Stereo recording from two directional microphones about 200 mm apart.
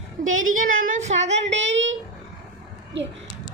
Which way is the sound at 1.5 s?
65° right (ahead or behind).